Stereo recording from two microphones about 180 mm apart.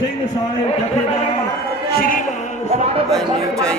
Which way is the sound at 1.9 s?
55° left (ahead or behind).